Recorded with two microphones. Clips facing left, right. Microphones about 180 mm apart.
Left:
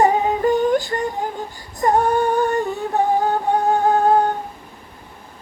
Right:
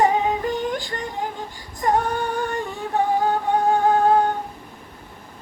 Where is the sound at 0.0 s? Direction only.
45° left (ahead or behind).